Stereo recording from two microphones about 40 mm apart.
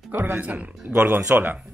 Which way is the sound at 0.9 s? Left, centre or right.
Right.